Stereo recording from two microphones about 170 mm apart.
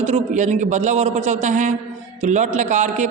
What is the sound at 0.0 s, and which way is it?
Speech, 45° right (ahead or behind).